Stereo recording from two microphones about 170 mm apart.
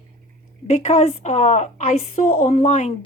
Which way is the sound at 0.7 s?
40° left (ahead or behind).